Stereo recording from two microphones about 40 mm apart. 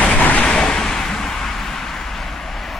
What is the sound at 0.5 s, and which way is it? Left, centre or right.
Vehicle, centre.